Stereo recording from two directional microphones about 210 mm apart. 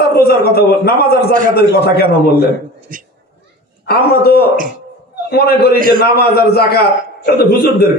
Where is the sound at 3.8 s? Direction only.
50° left (ahead or behind).